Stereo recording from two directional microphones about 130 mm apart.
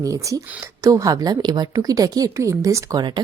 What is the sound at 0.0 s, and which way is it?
A woman's voice, 25° right (ahead or behind).